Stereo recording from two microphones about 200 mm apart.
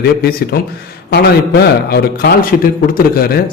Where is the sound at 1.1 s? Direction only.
55° left (ahead or behind).